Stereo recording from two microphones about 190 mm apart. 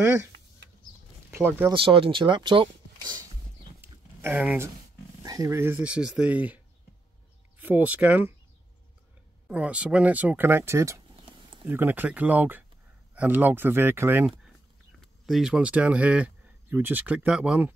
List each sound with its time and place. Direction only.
0.0 s speech: 15° right (ahead or behind)
1.3 s speech: 10° right (ahead or behind)
1.7 s speech: 30° right (ahead or behind)
4.2 s speech: 10° right (ahead or behind)
5.2 s speech: 20° right (ahead or behind)
9.5 s speech: 5° right (ahead or behind)